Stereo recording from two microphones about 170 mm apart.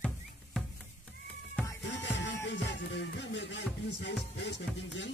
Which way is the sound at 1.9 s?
90° left.